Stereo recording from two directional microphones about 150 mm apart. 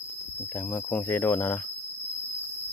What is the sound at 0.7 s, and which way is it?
Speech, 15° left (ahead or behind).